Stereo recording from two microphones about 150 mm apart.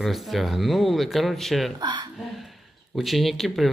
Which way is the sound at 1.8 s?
30° right (ahead or behind).